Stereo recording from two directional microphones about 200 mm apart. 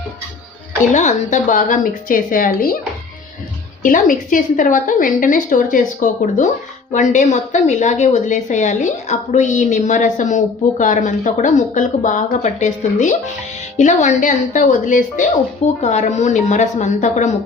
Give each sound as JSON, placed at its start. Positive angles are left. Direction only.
{"t": 0.8, "sound": "a woman's voice", "side_deg": 40}
{"t": 3.8, "sound": "a woman's voice", "side_deg": 40}